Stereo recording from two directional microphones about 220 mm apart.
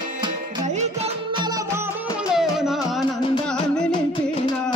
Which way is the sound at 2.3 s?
Centre (ahead or behind).